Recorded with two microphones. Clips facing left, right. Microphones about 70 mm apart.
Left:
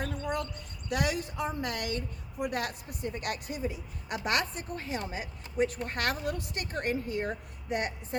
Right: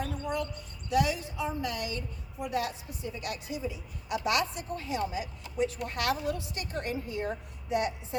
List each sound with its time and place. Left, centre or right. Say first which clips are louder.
0.0 s a woman's voice: even; left